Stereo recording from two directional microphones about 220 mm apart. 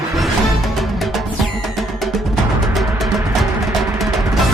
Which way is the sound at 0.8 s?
Centre (ahead or behind).